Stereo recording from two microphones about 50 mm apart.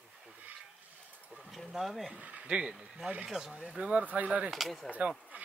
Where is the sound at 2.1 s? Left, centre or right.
Right.